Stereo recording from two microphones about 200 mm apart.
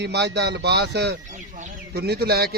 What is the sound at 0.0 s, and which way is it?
A man's voice, 60° right (ahead or behind).